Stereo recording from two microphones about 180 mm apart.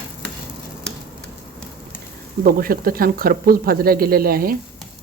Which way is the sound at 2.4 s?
55° right (ahead or behind).